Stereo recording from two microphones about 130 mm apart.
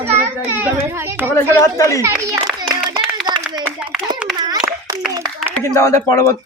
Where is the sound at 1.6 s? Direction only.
25° left (ahead or behind).